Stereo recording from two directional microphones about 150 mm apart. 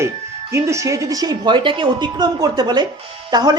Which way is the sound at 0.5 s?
20° right (ahead or behind).